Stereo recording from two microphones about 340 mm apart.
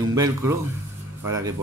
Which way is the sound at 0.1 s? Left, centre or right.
Centre.